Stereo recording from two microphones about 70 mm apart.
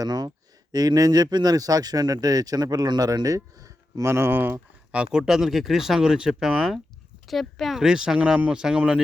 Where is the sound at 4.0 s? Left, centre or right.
Right.